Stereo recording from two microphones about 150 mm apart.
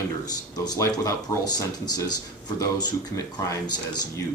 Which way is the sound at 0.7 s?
25° left (ahead or behind).